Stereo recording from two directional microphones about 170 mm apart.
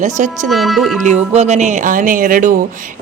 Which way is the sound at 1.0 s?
40° right (ahead or behind).